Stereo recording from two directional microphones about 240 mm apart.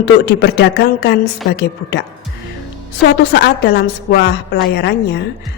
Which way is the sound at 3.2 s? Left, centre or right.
Left.